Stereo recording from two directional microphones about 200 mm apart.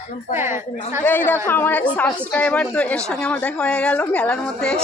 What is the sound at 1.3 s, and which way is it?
Speech, 10° left (ahead or behind).